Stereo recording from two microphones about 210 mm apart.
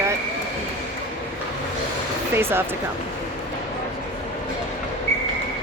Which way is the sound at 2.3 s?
10° right (ahead or behind).